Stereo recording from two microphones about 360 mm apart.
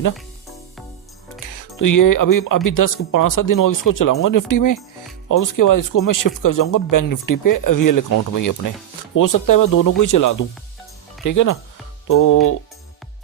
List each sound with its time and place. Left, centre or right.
1.5 s speech: left